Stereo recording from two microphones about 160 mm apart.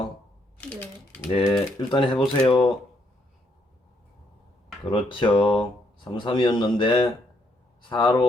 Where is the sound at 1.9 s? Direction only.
30° left (ahead or behind).